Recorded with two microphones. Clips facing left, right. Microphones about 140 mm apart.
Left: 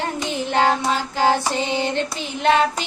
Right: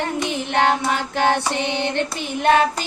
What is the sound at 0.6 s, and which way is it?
Child singing, 60° right (ahead or behind).